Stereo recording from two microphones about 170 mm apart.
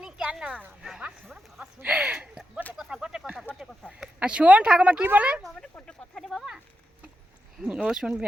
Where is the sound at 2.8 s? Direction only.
5° right (ahead or behind).